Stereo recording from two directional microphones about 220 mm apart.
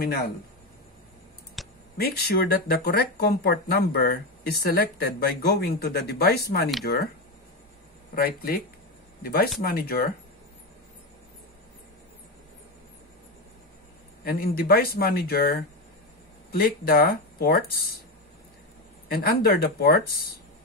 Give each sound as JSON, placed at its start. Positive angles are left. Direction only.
{"t": 0.0, "sound": "speech", "side_deg": 45}
{"t": 1.6, "sound": "a sound", "side_deg": 0}
{"t": 2.0, "sound": "speech", "side_deg": 45}
{"t": 8.1, "sound": "speech", "side_deg": 45}
{"t": 14.2, "sound": "speech", "side_deg": 40}
{"t": 19.0, "sound": "speech", "side_deg": 40}